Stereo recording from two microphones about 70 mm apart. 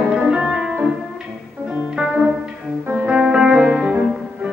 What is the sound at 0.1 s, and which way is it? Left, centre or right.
Music, centre.